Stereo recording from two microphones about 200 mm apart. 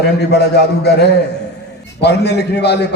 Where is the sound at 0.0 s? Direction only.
55° left (ahead or behind).